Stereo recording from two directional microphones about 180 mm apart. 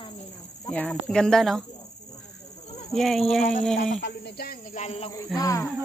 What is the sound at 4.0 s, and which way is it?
Snake, 70° left (ahead or behind).